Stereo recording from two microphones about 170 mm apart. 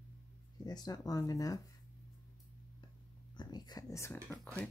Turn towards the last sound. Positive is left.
turn(degrees=15)  # may be behind; listen again after turning